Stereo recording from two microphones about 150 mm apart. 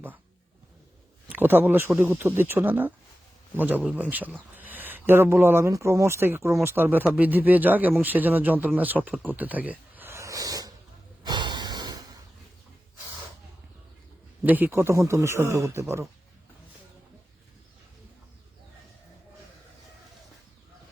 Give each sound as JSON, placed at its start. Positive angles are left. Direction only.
{"t": 1.3, "sound": "speech", "side_deg": -15}
{"t": 11.2, "sound": "snort", "side_deg": -30}
{"t": 14.4, "sound": "speech", "side_deg": -10}